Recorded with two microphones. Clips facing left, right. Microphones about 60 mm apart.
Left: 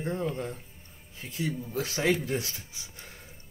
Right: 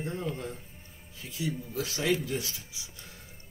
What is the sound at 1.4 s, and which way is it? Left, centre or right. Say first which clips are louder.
Speech: left 1 dB; left.